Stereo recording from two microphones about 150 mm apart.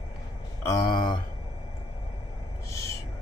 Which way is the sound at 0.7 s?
30° left (ahead or behind).